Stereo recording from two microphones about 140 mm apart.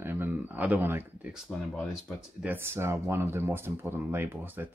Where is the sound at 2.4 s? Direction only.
15° right (ahead or behind).